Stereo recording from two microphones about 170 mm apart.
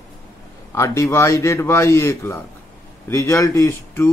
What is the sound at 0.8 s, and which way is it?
A man's voice, 15° left (ahead or behind).